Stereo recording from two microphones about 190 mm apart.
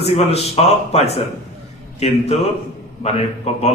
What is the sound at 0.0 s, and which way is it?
A man's voice, 30° left (ahead or behind).